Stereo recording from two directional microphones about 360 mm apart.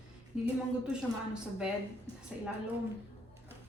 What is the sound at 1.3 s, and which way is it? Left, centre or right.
Speech, centre.